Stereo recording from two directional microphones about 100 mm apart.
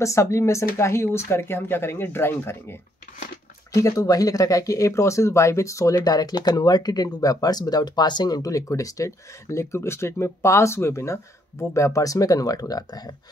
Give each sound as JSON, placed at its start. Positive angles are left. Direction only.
{"t": 0.0, "sound": "speech", "side_deg": 30}
{"t": 3.7, "sound": "speech", "side_deg": 35}